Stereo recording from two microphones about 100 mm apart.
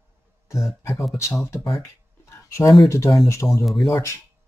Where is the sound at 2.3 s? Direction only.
30° left (ahead or behind).